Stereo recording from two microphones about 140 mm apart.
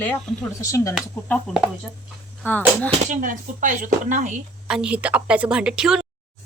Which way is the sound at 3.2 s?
70° right (ahead or behind).